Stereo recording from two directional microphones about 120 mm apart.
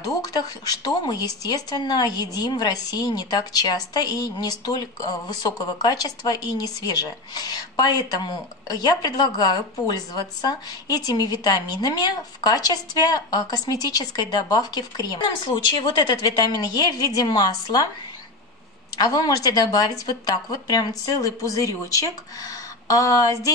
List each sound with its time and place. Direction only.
0.1 s speech: 35° left (ahead or behind)
18.9 s a woman's voice: 30° left (ahead or behind)